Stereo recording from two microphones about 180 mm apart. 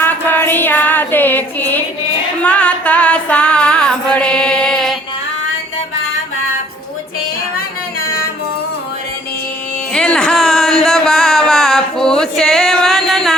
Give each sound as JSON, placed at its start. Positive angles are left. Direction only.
{"t": 0.0, "sound": "music", "side_deg": 10}
{"t": 8.0, "sound": "music", "side_deg": 55}
{"t": 9.9, "sound": "music", "side_deg": 5}